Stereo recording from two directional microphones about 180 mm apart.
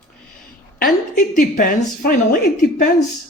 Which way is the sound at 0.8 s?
50° left (ahead or behind).